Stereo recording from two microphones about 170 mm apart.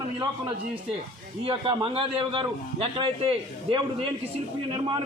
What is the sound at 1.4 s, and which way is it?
A man's voice, 30° right (ahead or behind).